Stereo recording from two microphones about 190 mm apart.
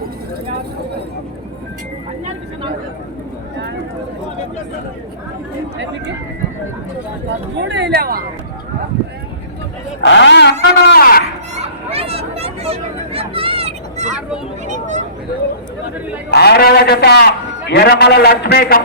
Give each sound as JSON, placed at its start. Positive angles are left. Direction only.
{"t": 7.7, "sound": "speech", "side_deg": -65}
{"t": 10.0, "sound": "a man's voice", "side_deg": 70}
{"t": 11.5, "sound": "chatter", "side_deg": -35}
{"t": 14.7, "sound": "speech", "side_deg": -40}
{"t": 16.3, "sound": "a man's voice", "side_deg": 60}